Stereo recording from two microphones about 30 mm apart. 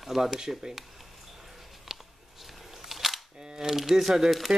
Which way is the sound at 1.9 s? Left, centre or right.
Centre.